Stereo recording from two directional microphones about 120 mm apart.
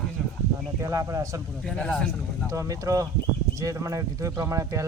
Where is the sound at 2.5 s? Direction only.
25° right (ahead or behind).